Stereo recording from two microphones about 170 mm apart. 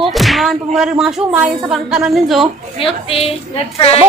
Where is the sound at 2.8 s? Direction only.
35° left (ahead or behind).